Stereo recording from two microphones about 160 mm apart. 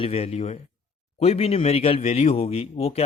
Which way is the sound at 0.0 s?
35° left (ahead or behind).